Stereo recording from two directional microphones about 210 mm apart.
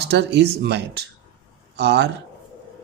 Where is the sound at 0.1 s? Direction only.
55° right (ahead or behind).